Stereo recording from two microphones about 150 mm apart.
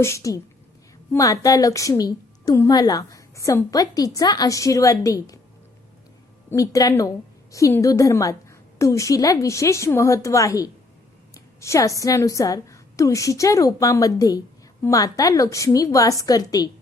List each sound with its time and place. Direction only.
0.0 s a woman's voice: 20° left (ahead or behind)
6.5 s a woman's voice: 20° left (ahead or behind)